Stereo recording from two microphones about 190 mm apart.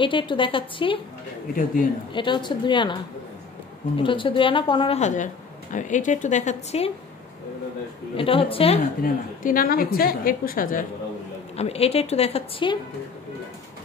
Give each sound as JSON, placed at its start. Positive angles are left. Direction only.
{"t": 0.0, "sound": "a woman's voice", "side_deg": 25}
{"t": 1.5, "sound": "a woman's voice", "side_deg": 45}
{"t": 2.1, "sound": "a woman's voice", "side_deg": 25}
{"t": 8.2, "sound": "a woman's voice", "side_deg": 30}
{"t": 9.0, "sound": "a woman's voice", "side_deg": 45}
{"t": 11.5, "sound": "speech", "side_deg": 35}